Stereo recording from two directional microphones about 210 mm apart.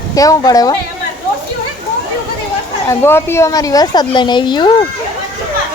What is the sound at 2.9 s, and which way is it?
A woman's voice, 10° left (ahead or behind).